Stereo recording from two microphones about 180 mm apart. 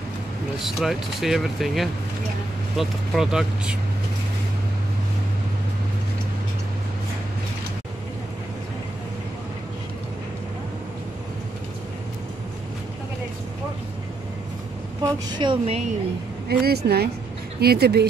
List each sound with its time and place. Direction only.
0.7 s speech: centre (ahead or behind)
15.0 s a woman's voice: 20° right (ahead or behind)
16.4 s speech: 65° right (ahead or behind)